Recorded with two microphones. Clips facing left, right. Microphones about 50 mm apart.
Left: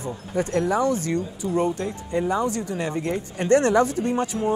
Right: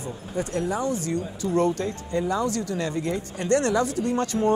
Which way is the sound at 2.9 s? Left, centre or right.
Left.